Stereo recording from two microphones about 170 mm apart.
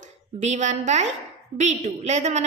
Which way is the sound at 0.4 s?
45° right (ahead or behind).